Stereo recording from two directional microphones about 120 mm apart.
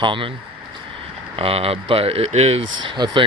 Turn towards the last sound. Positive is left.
turn(degrees=-40)  # may be behind; listen again after turning